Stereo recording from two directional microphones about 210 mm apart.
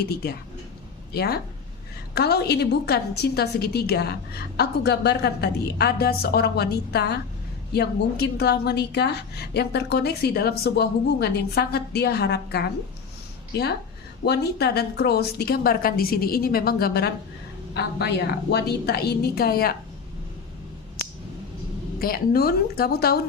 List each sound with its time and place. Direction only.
0.0 s a woman's voice: 50° left (ahead or behind)
18.5 s a woman's voice: 50° left (ahead or behind)
21.9 s a woman's voice: 45° left (ahead or behind)